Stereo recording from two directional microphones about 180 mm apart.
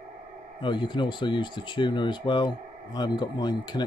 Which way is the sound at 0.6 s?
25° left (ahead or behind).